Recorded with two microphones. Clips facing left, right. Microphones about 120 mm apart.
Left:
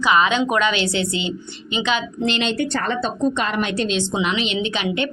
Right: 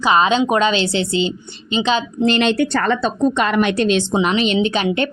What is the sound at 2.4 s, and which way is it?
A woman's voice, 80° right.